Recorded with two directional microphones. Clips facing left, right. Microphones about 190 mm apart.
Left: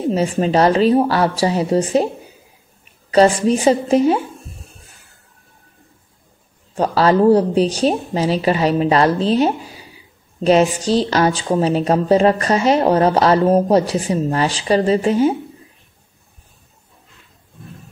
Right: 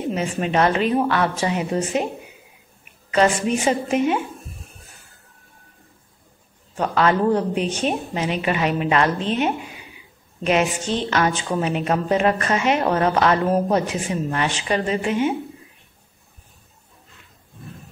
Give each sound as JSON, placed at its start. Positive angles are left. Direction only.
{"t": 0.1, "sound": "a woman's voice", "side_deg": 35}
{"t": 6.7, "sound": "a woman's voice", "side_deg": 35}